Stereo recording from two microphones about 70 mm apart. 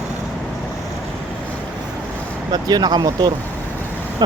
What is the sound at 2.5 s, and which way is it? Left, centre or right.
Speech, right.